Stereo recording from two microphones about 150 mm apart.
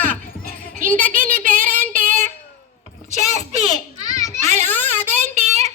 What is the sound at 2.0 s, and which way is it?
Child singing, 15° left (ahead or behind).